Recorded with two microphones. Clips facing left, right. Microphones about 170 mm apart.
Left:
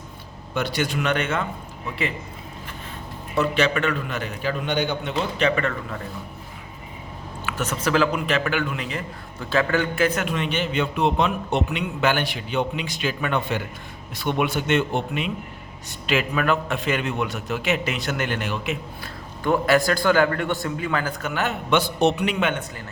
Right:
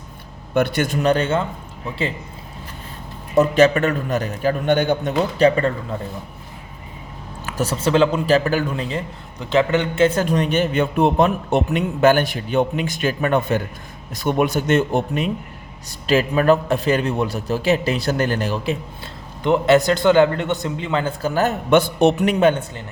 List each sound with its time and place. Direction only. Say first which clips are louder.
0.5 s a man's voice: right 6 dB; 55° right (ahead or behind)
0.9 s a man's voice: right 8 dB; 35° right (ahead or behind)
3.3 s a man's voice: right 7 dB; 40° right (ahead or behind)
7.4 s a man's voice: right 4 dB; 35° right (ahead or behind)
9.4 s a man's voice: right 4 dB; 20° right (ahead or behind); by 18.8 s 35° right (ahead or behind)
19.4 s a man's voice: right 4 dB; 20° right (ahead or behind); by 22.6 s 35° right (ahead or behind)